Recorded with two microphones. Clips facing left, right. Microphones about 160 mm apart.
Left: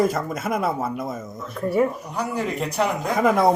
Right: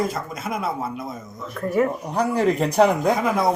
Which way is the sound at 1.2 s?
15° left (ahead or behind).